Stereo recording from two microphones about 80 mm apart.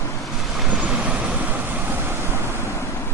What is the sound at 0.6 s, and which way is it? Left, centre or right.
Vehicle, centre.